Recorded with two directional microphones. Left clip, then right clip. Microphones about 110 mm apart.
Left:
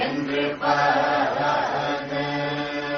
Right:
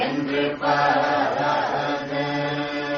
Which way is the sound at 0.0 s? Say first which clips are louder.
Right 1 dB; 25° left (ahead or behind).